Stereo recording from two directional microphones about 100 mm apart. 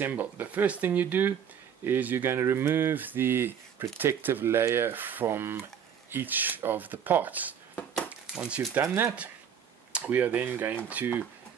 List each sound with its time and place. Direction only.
0.0 s speech: 20° right (ahead or behind)